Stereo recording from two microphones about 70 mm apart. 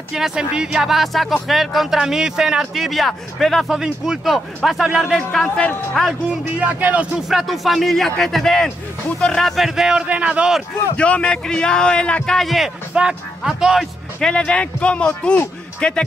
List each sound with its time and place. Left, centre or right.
0.1 s speech: centre
5.1 s a man's voice: centre
6.6 s speech: right
7.2 s a man's voice: centre
9.7 s speech: centre
10.0 s speech: centre
11.0 s a man's voice: centre
14.2 s a man's voice: centre